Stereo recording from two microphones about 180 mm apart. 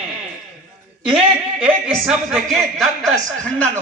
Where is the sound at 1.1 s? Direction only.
5° right (ahead or behind).